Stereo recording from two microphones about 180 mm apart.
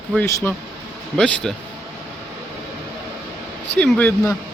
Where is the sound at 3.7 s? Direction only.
5° left (ahead or behind).